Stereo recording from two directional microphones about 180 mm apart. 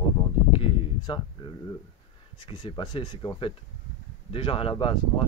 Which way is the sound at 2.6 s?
25° left (ahead or behind).